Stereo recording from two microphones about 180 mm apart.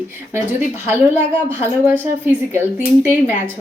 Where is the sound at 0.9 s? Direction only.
10° right (ahead or behind).